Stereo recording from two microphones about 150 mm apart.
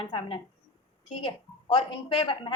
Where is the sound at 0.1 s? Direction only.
30° left (ahead or behind).